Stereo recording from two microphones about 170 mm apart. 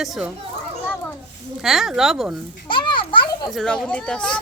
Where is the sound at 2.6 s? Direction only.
30° left (ahead or behind).